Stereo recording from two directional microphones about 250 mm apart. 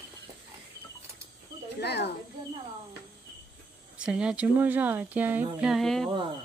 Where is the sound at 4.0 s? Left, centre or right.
Centre.